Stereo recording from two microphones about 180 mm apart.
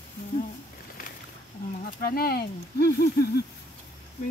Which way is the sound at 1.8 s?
55° left (ahead or behind).